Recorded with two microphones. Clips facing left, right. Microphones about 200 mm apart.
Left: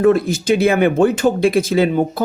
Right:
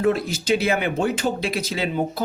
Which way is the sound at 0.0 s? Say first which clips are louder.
Left 7 dB; 50° left (ahead or behind).